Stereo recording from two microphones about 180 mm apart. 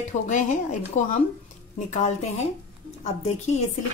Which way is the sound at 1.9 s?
40° left (ahead or behind).